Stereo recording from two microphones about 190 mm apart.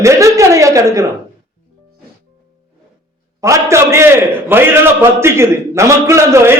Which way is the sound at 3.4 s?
15° right (ahead or behind).